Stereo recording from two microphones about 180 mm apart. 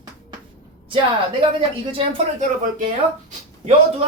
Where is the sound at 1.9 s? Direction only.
30° right (ahead or behind).